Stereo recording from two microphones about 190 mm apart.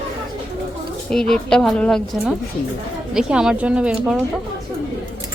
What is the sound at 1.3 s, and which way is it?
Speech, 5° left (ahead or behind).